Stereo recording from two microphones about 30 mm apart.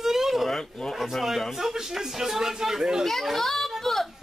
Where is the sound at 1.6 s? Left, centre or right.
Centre.